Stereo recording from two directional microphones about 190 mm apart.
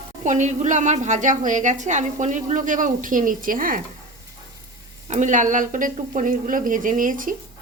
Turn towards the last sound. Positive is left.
turn(degrees=-45)  # may be behind; listen again after turning